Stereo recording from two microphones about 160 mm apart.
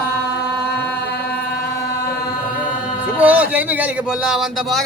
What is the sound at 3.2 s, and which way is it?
Speech, 10° right (ahead or behind).